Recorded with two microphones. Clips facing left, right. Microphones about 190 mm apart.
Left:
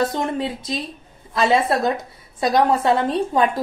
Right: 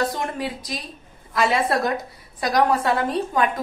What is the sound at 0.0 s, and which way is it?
A woman's voice, 25° left (ahead or behind).